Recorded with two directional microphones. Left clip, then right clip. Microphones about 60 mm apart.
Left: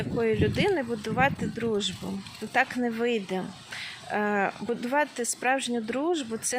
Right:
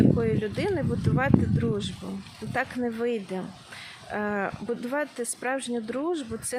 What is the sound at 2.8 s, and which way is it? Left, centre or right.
Speech, centre.